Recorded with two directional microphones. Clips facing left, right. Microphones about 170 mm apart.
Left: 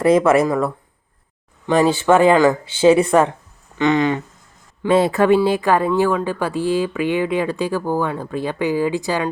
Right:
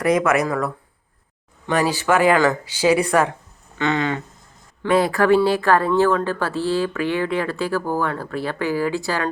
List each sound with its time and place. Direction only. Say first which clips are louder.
0.0 s speech: left 4 dB; 30° left (ahead or behind)